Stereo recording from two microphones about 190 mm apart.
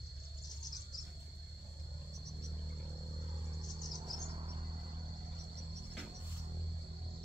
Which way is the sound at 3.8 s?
20° right (ahead or behind).